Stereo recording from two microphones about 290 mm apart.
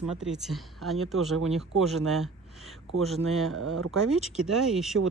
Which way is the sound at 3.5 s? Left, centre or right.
Right.